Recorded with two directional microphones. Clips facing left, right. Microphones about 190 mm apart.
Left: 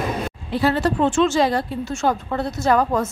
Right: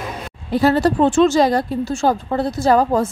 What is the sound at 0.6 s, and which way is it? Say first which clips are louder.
A woman's voice: right 4 dB; 40° right (ahead or behind).